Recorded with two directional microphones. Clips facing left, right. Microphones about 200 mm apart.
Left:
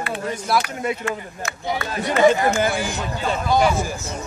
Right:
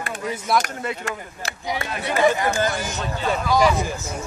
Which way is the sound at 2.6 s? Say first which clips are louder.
Left 2 dB; 10° left (ahead or behind).